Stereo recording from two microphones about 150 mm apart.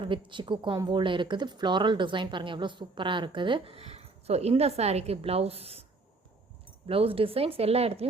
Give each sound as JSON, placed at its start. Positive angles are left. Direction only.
{"t": 0.0, "sound": "speech", "side_deg": -35}
{"t": 6.8, "sound": "speech", "side_deg": -40}